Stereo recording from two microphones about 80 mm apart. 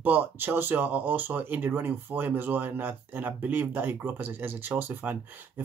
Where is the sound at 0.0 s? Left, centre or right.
Right.